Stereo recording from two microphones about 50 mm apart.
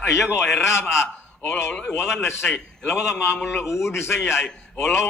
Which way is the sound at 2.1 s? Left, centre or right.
Left.